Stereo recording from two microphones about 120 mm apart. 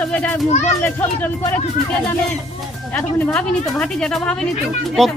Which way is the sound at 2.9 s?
10° left (ahead or behind).